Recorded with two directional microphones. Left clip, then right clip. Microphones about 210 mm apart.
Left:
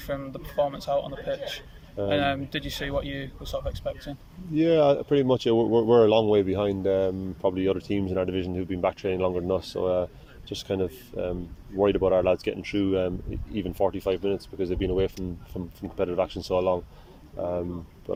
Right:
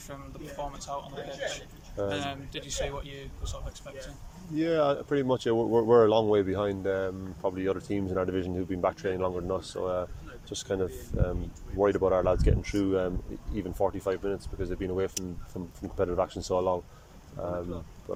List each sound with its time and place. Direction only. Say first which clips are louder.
0.1 s speech: left 10 dB; 45° left (ahead or behind)
4.5 s speech: left 6 dB; 10° left (ahead or behind)